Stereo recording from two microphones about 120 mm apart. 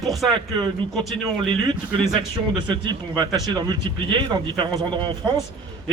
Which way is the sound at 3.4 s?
35° right (ahead or behind).